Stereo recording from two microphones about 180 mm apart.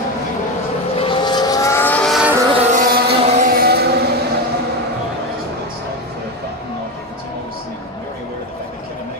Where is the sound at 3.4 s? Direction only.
60° right (ahead or behind).